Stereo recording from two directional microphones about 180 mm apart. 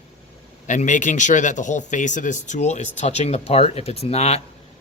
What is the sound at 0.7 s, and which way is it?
Speech, 45° left (ahead or behind).